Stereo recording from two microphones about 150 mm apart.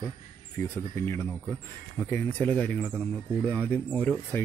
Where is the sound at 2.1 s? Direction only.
10° left (ahead or behind).